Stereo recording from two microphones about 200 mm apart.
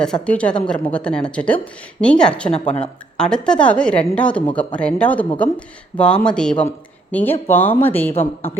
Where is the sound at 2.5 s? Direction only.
35° left (ahead or behind).